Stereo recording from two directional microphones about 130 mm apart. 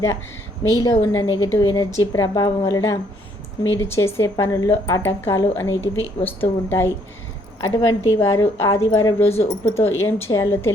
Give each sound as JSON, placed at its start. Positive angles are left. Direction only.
{"t": 0.7, "sound": "a woman's voice", "side_deg": 30}
{"t": 9.3, "sound": "speech", "side_deg": 50}
{"t": 9.8, "sound": "a woman's voice", "side_deg": 20}